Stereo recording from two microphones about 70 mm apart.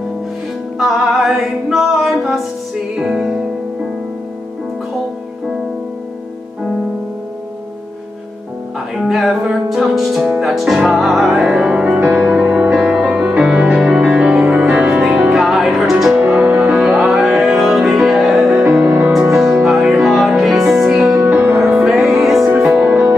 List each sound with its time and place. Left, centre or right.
0.7 s music: centre
8.9 s music: centre
18.7 s music: centre
19.1 s music: centre
21.4 s music: right
21.7 s music: centre